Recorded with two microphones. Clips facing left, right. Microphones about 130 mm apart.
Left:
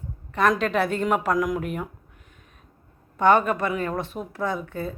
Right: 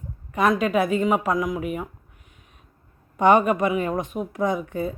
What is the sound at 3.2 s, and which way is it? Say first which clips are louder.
Speech: right 2 dB; 15° right (ahead or behind).